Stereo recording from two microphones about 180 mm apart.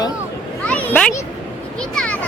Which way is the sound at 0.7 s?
5° left (ahead or behind).